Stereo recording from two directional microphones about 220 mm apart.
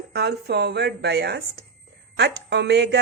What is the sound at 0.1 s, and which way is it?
Speech, 50° right (ahead or behind).